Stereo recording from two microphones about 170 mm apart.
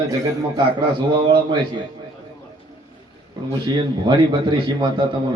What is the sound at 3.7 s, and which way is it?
Speech, 25° right (ahead or behind).